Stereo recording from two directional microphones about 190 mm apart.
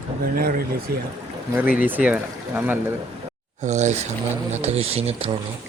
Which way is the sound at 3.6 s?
40° right (ahead or behind).